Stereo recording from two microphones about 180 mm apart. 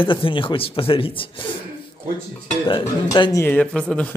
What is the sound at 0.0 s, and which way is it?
A man's voice, 30° left (ahead or behind).